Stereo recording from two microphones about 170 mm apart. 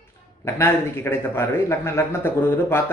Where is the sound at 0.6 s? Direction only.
15° left (ahead or behind).